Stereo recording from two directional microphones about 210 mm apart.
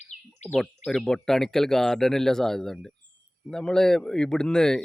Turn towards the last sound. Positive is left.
turn(degrees=5)  # may be behind; listen again after turning